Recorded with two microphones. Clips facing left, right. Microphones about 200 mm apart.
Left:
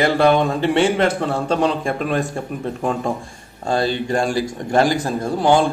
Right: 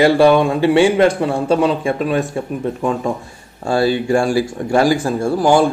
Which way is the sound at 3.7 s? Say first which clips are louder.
Right 5 dB; 10° right (ahead or behind).